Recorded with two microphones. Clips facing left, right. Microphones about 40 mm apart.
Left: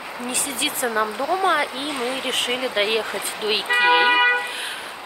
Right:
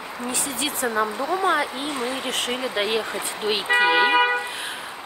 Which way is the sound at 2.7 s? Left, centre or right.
Left.